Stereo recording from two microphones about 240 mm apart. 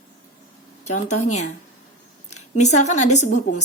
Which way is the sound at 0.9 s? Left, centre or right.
Left.